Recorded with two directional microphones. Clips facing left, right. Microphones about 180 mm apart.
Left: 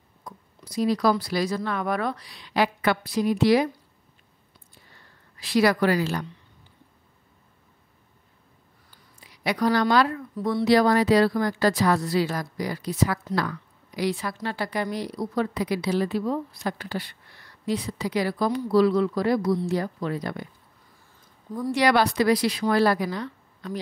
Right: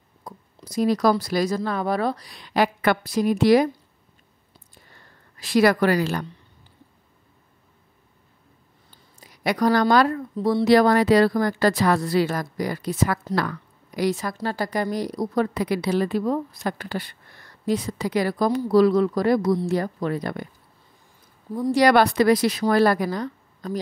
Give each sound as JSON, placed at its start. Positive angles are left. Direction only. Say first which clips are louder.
{"t": 0.3, "sound": "a sound", "louder": "right 2 dB", "side_deg": -30}
{"t": 0.7, "sound": "a woman's voice", "louder": "right 2 dB", "side_deg": -45}
{"t": 5.4, "sound": "a woman's voice", "louder": "right 3 dB", "side_deg": -50}
{"t": 9.2, "sound": "a woman's voice", "louder": "right 3 dB", "side_deg": -45}
{"t": 10.4, "sound": "speech", "louder": "right 4 dB", "side_deg": -35}
{"t": 10.7, "sound": "a woman's voice", "louder": "right 2 dB", "side_deg": -55}
{"t": 21.5, "sound": "speech", "louder": "right 4 dB", "side_deg": -20}
{"t": 21.7, "sound": "a woman's voice", "louder": "right 4 dB", "side_deg": -50}